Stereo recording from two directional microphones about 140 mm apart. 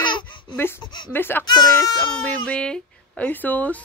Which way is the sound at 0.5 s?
15° left (ahead or behind).